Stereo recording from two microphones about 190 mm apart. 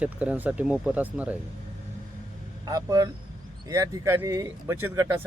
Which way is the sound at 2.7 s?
20° right (ahead or behind).